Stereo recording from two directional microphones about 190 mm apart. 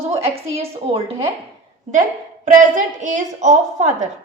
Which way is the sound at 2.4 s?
45° right (ahead or behind).